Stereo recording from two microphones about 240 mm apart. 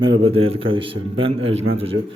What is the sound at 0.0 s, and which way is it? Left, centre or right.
A man's voice, right.